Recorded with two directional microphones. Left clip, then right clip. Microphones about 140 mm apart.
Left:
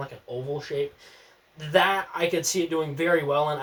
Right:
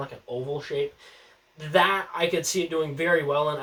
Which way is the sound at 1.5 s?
20° left (ahead or behind).